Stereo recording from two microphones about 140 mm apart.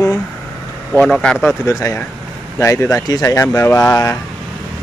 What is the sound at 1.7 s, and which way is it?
Speech, 20° left (ahead or behind).